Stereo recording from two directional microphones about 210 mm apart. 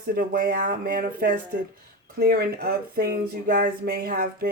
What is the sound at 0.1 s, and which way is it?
Speech, 40° right (ahead or behind).